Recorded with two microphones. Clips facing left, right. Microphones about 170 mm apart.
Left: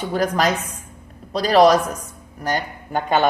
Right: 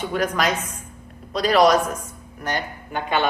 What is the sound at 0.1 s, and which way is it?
A woman's voice, 35° left (ahead or behind).